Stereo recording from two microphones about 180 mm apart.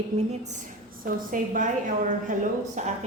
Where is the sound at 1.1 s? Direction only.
50° right (ahead or behind).